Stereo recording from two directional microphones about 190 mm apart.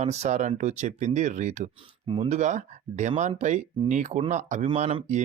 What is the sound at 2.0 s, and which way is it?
Speech, 25° right (ahead or behind).